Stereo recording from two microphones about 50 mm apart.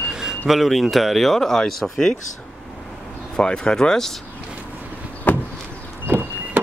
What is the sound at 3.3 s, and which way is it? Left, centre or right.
Speech, centre.